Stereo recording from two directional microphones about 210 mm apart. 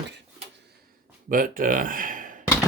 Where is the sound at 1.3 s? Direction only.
40° right (ahead or behind).